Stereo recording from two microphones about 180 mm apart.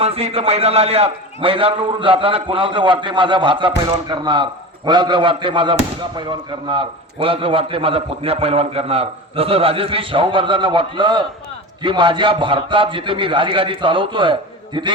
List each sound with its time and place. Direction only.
0.0 s speech: 35° right (ahead or behind)